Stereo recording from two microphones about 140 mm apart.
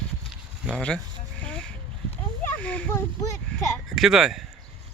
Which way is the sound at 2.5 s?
10° left (ahead or behind).